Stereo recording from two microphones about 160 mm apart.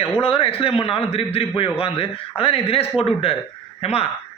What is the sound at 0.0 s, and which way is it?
A man's voice, 35° left (ahead or behind).